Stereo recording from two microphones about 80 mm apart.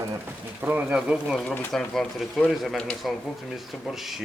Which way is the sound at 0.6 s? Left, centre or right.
Right.